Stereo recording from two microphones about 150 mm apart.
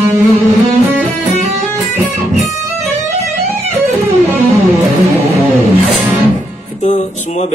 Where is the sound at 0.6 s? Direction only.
45° right (ahead or behind).